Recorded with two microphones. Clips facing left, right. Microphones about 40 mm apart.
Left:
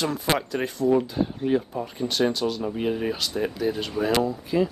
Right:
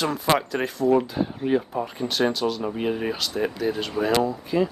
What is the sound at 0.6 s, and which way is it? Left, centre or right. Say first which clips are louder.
Speech: right 1 dB; centre.